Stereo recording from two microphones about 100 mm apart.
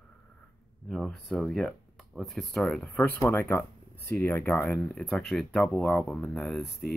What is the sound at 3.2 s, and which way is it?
Speech, 25° left (ahead or behind).